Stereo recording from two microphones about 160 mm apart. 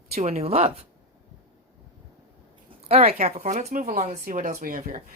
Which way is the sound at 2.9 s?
40° right (ahead or behind).